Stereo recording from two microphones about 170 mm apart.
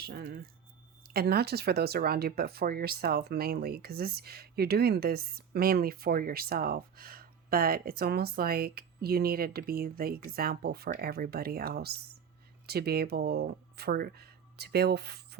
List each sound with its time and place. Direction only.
0.0 s speech: 70° right (ahead or behind)